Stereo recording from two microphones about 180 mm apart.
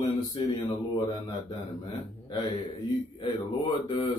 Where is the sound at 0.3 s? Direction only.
25° left (ahead or behind).